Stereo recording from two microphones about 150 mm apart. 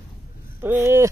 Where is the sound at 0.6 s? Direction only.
15° right (ahead or behind).